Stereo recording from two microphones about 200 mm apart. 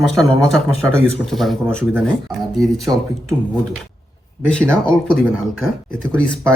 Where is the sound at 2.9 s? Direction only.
20° right (ahead or behind).